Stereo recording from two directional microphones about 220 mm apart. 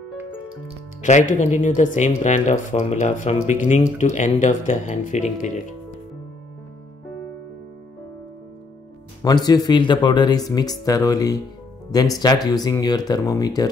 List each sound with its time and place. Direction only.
1.0 s speech: 35° left (ahead or behind)
9.2 s speech: 20° left (ahead or behind)